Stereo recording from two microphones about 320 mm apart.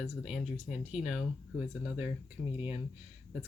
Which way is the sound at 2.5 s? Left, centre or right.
Centre.